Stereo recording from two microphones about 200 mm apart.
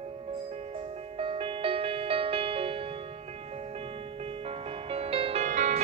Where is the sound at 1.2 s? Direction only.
25° right (ahead or behind).